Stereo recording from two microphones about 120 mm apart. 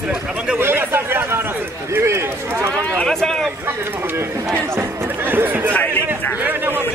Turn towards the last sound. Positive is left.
turn(degrees=-15)  # may be behind; listen again after turning